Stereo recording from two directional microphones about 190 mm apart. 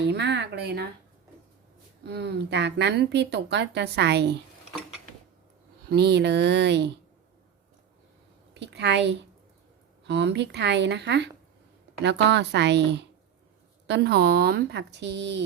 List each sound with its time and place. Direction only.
0.0 s speech: 65° right (ahead or behind)
2.0 s speech: 60° right (ahead or behind)
5.9 s speech: 60° right (ahead or behind)
8.5 s a sound: 65° right (ahead or behind)
10.0 s speech: 65° right (ahead or behind)